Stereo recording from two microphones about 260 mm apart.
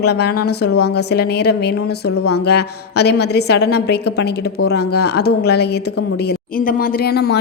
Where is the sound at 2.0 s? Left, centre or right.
Left.